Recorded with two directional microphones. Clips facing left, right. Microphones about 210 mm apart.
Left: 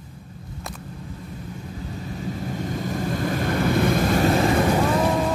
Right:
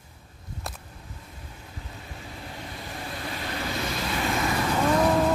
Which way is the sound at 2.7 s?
45° left (ahead or behind).